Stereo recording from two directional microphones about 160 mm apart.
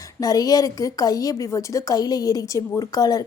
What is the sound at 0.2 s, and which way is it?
Speech, 20° left (ahead or behind).